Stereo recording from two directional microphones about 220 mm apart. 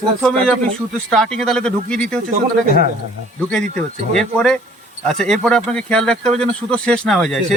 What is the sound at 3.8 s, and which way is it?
Speech, 5° left (ahead or behind).